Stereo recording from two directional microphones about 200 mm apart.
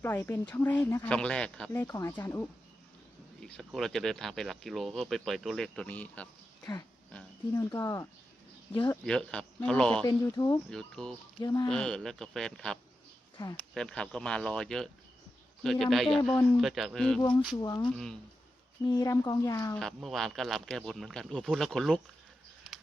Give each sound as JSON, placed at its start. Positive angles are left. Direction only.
{"t": 0.0, "sound": "speech", "side_deg": 10}
{"t": 7.5, "sound": "speech", "side_deg": 15}
{"t": 8.9, "sound": "speech", "side_deg": 5}
{"t": 10.1, "sound": "speech", "side_deg": 15}
{"t": 10.7, "sound": "speech", "side_deg": 5}
{"t": 11.4, "sound": "speech", "side_deg": 15}
{"t": 11.7, "sound": "speech", "side_deg": 5}
{"t": 13.3, "sound": "speech", "side_deg": 20}
{"t": 13.6, "sound": "speech", "side_deg": 5}
{"t": 17.2, "sound": "speech", "side_deg": 20}
{"t": 17.8, "sound": "speech", "side_deg": 5}
{"t": 18.9, "sound": "speech", "side_deg": 15}
{"t": 19.8, "sound": "speech", "side_deg": 0}